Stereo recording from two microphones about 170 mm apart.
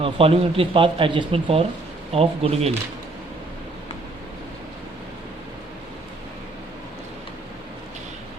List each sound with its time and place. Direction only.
0.0 s speech: 35° right (ahead or behind)